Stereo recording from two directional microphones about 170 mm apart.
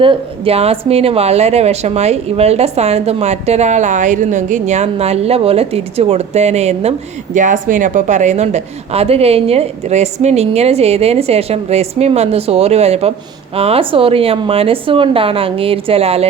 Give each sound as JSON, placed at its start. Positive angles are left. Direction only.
{"t": 0.0, "sound": "a woman's voice", "side_deg": -35}